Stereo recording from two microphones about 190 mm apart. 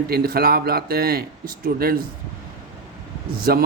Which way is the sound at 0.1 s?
55° right (ahead or behind).